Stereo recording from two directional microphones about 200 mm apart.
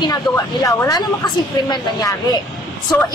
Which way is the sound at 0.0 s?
20° left (ahead or behind).